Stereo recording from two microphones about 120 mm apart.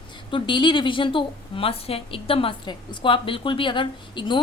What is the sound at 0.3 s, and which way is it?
A woman's voice, 45° left (ahead or behind).